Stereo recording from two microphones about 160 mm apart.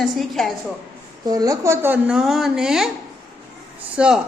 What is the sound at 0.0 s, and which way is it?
Speech, centre (ahead or behind).